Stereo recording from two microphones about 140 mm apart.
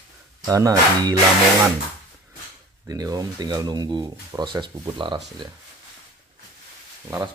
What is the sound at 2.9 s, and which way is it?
Speech, 25° right (ahead or behind).